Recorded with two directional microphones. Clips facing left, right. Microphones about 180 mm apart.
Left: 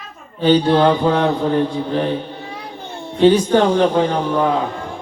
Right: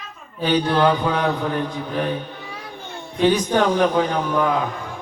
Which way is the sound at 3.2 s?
30° left (ahead or behind).